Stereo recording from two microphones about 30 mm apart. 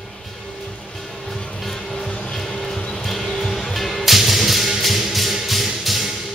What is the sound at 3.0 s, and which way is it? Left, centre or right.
Music, centre.